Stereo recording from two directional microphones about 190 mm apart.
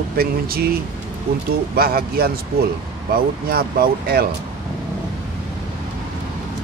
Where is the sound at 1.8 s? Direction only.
55° right (ahead or behind).